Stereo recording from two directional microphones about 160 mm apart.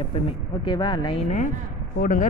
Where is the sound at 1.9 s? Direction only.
60° left (ahead or behind).